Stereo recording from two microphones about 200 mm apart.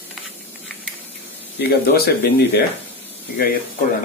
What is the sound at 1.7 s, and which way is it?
Speech, 50° left (ahead or behind).